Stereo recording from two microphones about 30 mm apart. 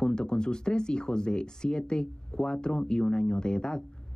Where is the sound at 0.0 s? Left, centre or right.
Left.